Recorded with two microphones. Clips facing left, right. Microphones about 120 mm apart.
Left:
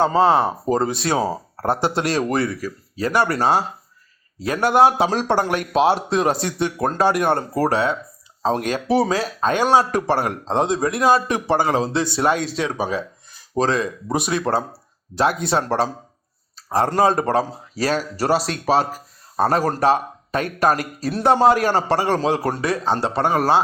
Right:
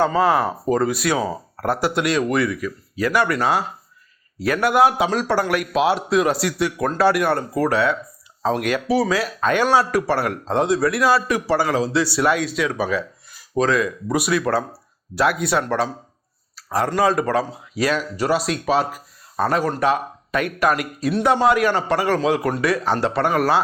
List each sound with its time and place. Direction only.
0.0 s speech: 30° left (ahead or behind)
12.7 s speech: 20° left (ahead or behind)